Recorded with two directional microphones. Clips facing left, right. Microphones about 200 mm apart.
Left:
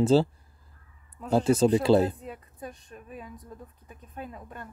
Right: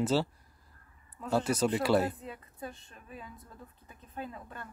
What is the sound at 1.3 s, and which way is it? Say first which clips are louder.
Speech: left 7 dB; 25° left (ahead or behind).